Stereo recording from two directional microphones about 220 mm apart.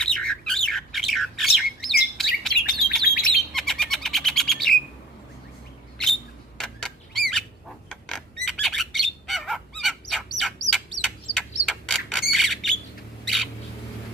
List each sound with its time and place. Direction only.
0.0 s bird: 5° left (ahead or behind)
6.6 s a sound: centre (ahead or behind)
7.9 s squawk: centre (ahead or behind)
11.0 s bird: 5° left (ahead or behind)
13.2 s rodents: centre (ahead or behind)